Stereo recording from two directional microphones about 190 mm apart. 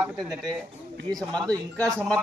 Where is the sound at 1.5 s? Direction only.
15° right (ahead or behind).